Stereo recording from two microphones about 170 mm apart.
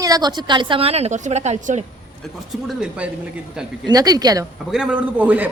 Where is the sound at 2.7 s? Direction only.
5° right (ahead or behind).